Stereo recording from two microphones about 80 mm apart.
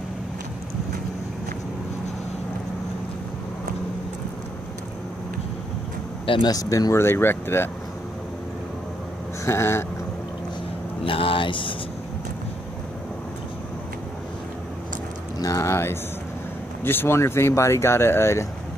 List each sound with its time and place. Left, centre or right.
6.2 s speech: left
6.5 s speech: left
6.9 s speech: left
9.4 s a sound: left
11.1 s speech: left
15.3 s speech: left